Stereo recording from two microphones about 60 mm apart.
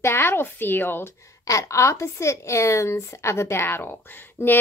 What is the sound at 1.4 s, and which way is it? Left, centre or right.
Speech, left.